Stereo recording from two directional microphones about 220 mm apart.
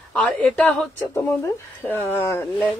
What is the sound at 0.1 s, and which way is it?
A woman's voice, 5° left (ahead or behind).